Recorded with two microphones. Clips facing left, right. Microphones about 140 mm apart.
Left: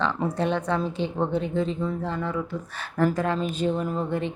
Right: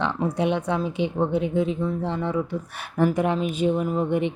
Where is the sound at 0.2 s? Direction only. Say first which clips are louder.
Right 2 dB; 10° right (ahead or behind).